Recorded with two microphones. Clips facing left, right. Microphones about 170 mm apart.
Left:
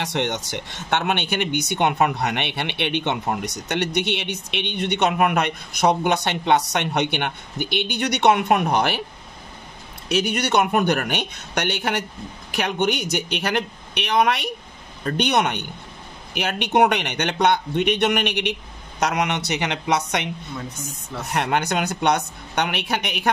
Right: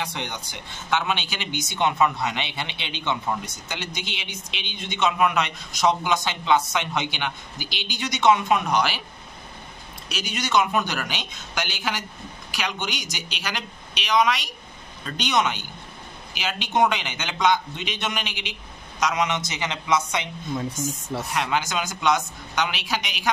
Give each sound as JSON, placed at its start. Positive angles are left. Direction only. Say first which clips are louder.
{"t": 0.0, "sound": "speech", "louder": "left 7 dB", "side_deg": 75}
{"t": 10.0, "sound": "speech", "louder": "left 9 dB", "side_deg": 60}
{"t": 21.3, "sound": "speech", "louder": "left 5 dB", "side_deg": 60}